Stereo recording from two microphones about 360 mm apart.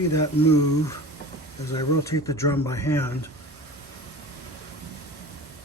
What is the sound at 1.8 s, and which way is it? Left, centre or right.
Speech, centre.